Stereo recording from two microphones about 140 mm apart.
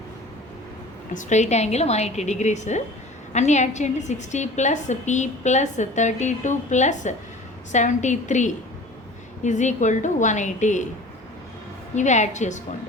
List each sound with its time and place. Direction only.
1.1 s a woman's voice: 60° left (ahead or behind)
11.9 s a woman's voice: 55° left (ahead or behind)